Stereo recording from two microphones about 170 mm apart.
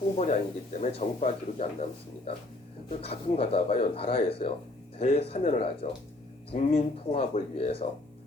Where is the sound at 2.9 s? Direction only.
35° left (ahead or behind).